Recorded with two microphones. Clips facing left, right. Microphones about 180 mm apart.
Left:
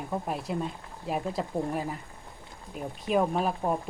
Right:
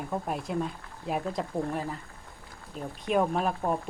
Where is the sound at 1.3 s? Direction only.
10° left (ahead or behind).